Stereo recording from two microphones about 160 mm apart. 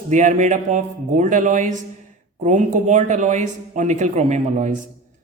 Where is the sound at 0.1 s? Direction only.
50° right (ahead or behind).